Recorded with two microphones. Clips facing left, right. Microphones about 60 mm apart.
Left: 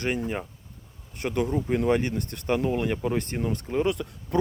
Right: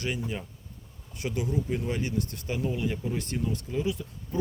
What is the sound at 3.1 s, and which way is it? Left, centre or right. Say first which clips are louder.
Speech: left 3 dB; left.